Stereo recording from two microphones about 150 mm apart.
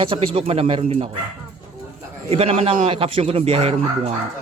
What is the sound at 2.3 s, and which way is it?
Speech, 40° right (ahead or behind).